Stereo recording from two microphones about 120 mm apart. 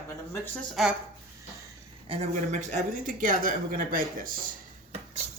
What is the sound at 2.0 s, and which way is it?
Speech, 70° right (ahead or behind).